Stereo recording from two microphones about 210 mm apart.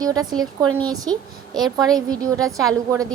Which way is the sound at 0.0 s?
20° right (ahead or behind).